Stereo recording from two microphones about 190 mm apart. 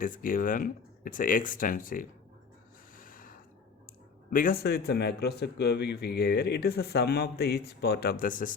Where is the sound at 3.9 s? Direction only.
45° left (ahead or behind).